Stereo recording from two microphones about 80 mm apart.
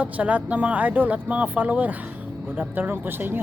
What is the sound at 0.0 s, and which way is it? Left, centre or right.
A man's voice, centre.